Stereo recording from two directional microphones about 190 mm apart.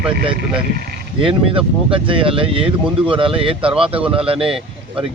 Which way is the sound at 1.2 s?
30° right (ahead or behind).